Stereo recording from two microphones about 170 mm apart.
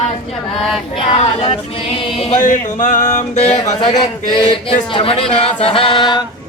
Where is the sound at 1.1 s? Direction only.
35° left (ahead or behind).